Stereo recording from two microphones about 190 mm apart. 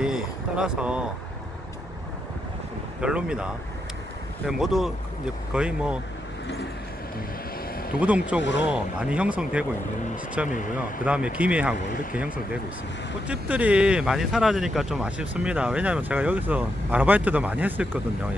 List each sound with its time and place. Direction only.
0.0 s vehicle: 5° right (ahead or behind)
3.0 s speech: 5° right (ahead or behind)
4.5 s speech: 5° right (ahead or behind)
8.0 s speech: 5° right (ahead or behind)
8.4 s speech: 70° left (ahead or behind)
8.6 s speech: 5° right (ahead or behind)
10.5 s speech: 40° left (ahead or behind)
11.1 s speech: 5° right (ahead or behind)
13.3 s speech: 5° right (ahead or behind)